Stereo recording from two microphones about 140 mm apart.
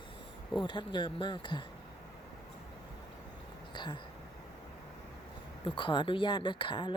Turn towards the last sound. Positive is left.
turn(degrees=35)  # may be behind; listen again after turning